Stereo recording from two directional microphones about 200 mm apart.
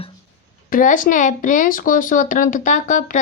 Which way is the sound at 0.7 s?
40° left (ahead or behind).